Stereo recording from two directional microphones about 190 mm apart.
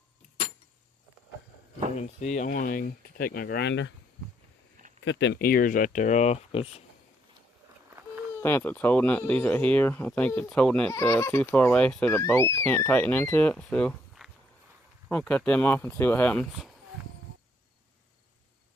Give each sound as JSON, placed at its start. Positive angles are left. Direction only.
{"t": 2.0, "sound": "speech", "side_deg": 40}
{"t": 5.0, "sound": "speech", "side_deg": 65}
{"t": 8.4, "sound": "speech", "side_deg": 10}